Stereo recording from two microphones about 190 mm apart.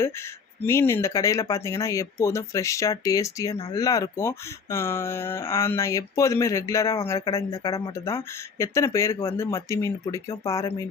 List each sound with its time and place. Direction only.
0.6 s speech: 15° left (ahead or behind)